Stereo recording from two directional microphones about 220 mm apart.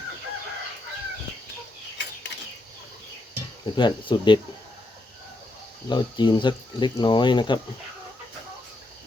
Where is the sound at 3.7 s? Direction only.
20° left (ahead or behind).